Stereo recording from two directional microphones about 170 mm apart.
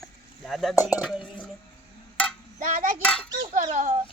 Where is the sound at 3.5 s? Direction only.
45° right (ahead or behind).